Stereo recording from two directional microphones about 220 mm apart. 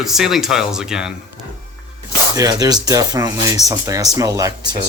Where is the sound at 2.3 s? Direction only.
15° right (ahead or behind).